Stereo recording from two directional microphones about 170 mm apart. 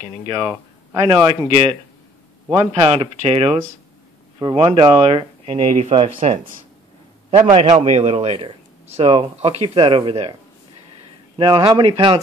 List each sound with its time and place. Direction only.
0.3 s a man's voice: 25° right (ahead or behind)
4.4 s a man's voice: 25° right (ahead or behind)
11.3 s speech: 30° right (ahead or behind)